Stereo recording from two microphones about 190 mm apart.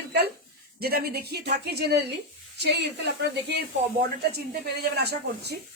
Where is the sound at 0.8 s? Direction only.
55° right (ahead or behind).